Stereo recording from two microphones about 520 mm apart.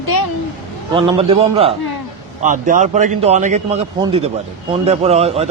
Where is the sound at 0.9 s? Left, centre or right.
Centre.